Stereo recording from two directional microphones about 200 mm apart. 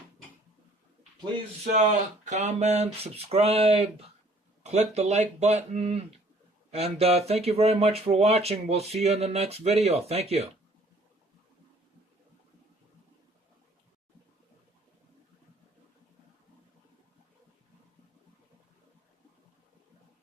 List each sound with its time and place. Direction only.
1.7 s speech: 35° right (ahead or behind)